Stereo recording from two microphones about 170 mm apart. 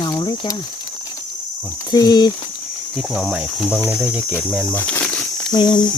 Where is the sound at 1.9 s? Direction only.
25° left (ahead or behind).